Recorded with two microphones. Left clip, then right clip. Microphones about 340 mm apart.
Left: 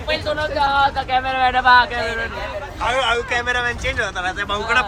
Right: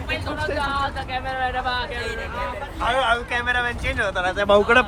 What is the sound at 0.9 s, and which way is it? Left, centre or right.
Speech, left.